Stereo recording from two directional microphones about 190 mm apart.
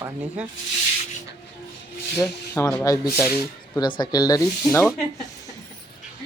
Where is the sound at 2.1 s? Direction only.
15° left (ahead or behind).